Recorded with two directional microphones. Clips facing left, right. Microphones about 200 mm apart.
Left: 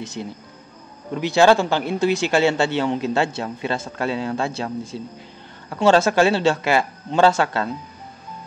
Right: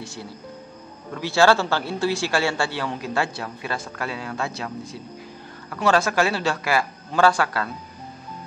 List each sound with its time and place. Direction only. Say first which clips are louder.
0.0 s speech: left 4 dB; 20° left (ahead or behind)